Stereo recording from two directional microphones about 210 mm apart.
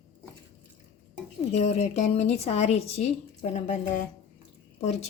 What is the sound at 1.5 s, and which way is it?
Dishes, 30° left (ahead or behind).